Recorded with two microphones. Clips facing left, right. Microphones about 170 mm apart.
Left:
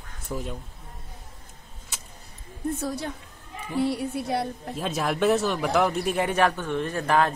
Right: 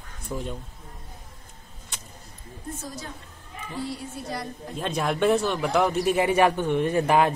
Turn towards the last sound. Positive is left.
turn(degrees=-15)  # may be behind; listen again after turning